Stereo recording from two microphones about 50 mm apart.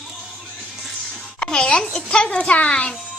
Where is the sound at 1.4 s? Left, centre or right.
Centre.